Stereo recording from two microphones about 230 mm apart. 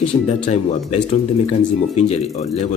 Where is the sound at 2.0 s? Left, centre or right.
Left.